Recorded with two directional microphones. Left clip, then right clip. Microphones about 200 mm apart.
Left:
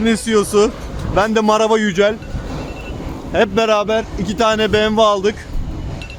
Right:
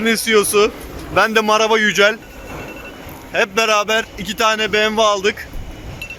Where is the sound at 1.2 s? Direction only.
15° left (ahead or behind).